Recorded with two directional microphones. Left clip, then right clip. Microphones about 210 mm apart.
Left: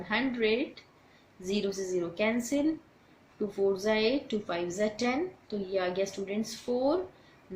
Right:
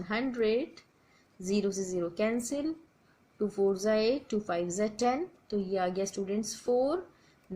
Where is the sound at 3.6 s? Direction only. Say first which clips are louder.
Even; 35° right (ahead or behind).